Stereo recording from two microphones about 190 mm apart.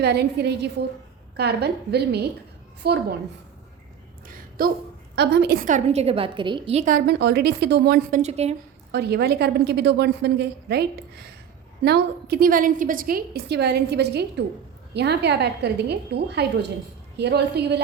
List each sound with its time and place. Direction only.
0.0 s a woman's voice: 60° right (ahead or behind)
4.6 s a woman's voice: 50° right (ahead or behind)
5.1 s a woman's voice: 60° right (ahead or behind)
8.2 s a woman's voice: 35° right (ahead or behind)
8.9 s a woman's voice: 60° right (ahead or behind)